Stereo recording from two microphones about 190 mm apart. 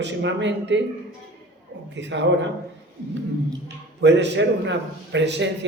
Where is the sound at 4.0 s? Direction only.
65° right (ahead or behind).